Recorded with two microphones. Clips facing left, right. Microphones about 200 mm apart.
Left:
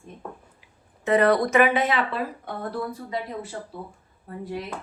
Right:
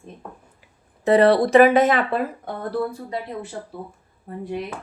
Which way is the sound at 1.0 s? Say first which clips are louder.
Right 4 dB; 30° right (ahead or behind).